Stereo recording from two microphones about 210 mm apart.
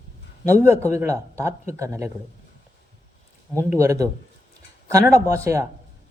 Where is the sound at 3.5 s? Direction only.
15° right (ahead or behind).